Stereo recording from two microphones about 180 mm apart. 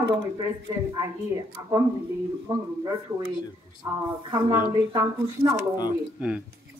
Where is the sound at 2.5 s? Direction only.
25° right (ahead or behind).